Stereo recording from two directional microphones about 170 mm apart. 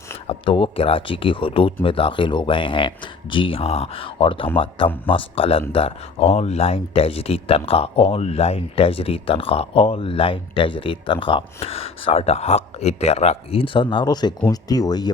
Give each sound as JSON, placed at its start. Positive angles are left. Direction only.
{"t": 0.3, "sound": "speech", "side_deg": 30}